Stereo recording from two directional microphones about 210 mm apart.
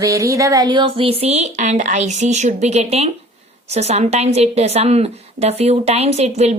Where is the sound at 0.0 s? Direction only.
15° right (ahead or behind).